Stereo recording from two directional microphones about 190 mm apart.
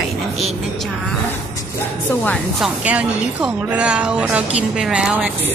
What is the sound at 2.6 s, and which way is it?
A woman's voice, 5° right (ahead or behind).